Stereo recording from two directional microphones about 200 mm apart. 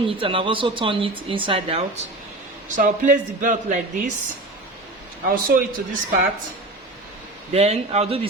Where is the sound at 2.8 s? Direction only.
40° right (ahead or behind).